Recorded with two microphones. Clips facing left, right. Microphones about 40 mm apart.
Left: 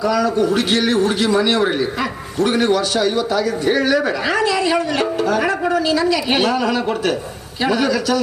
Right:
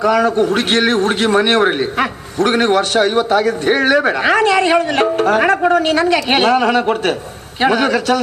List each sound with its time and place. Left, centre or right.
0.0 s a man's voice: right